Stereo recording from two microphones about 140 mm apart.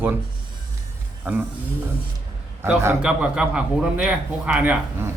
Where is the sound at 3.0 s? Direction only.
5° right (ahead or behind).